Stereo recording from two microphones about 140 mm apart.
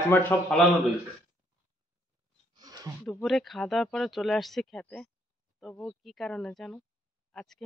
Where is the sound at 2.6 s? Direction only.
25° right (ahead or behind).